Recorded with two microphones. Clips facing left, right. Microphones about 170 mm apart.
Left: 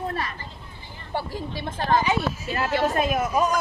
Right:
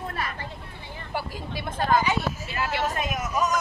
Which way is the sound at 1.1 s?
30° left (ahead or behind).